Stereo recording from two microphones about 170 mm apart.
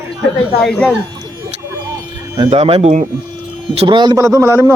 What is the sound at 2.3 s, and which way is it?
Speech, 30° right (ahead or behind).